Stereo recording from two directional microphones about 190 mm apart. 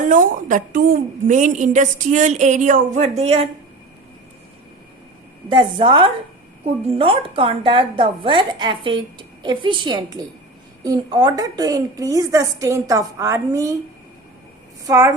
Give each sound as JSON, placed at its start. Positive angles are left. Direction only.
{"t": 0.0, "sound": "a woman's voice", "side_deg": -40}
{"t": 5.5, "sound": "a woman's voice", "side_deg": -25}
{"t": 14.8, "sound": "a woman's voice", "side_deg": -15}